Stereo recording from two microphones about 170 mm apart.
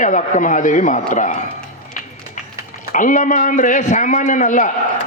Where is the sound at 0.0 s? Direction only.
45° left (ahead or behind).